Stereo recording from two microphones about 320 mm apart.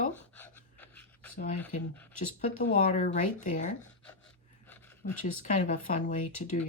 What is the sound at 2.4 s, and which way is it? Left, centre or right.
Speech, left.